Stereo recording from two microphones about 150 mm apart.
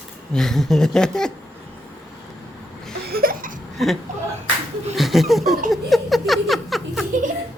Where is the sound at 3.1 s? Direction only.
75° right (ahead or behind).